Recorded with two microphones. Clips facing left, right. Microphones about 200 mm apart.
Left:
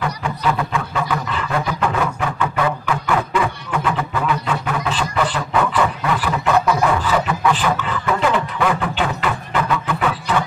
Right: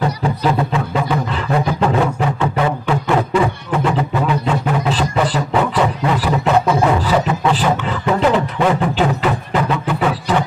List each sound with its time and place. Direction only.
0.0 s beatboxing: 30° right (ahead or behind)
1.7 s a sound: 30° right (ahead or behind)
6.4 s music: 25° right (ahead or behind)